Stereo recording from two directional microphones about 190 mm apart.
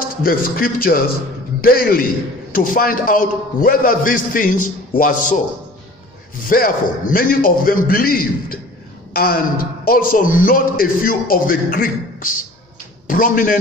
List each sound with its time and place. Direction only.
0.2 s a man's voice: 50° left (ahead or behind)
6.5 s a man's voice: 50° left (ahead or behind)